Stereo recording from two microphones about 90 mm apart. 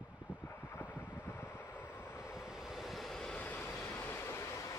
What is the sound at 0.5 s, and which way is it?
Vehicle, 25° left (ahead or behind).